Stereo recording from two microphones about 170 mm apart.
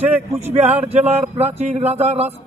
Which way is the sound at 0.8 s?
40° right (ahead or behind).